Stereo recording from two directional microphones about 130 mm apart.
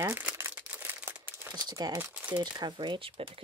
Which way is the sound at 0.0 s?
20° right (ahead or behind).